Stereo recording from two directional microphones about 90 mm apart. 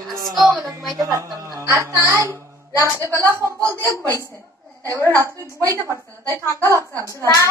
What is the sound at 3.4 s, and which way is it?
Speech, 35° right (ahead or behind).